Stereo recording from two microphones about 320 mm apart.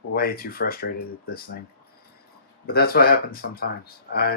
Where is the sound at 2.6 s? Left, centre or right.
Left.